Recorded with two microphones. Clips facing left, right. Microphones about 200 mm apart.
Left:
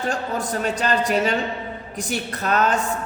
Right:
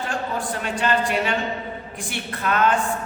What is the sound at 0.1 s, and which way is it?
A woman's voice, 40° left (ahead or behind).